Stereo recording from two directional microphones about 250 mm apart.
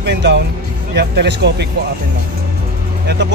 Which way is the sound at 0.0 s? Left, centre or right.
Right.